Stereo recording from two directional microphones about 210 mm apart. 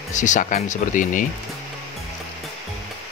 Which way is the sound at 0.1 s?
35° left (ahead or behind).